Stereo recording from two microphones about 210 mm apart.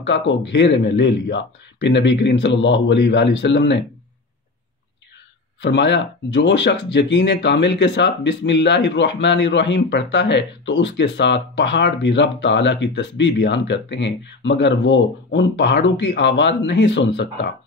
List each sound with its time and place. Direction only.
0.0 s speech: 55° left (ahead or behind)
5.6 s speech: 55° left (ahead or behind)